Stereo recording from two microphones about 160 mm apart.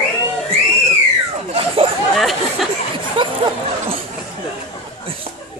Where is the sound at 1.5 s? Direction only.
35° right (ahead or behind).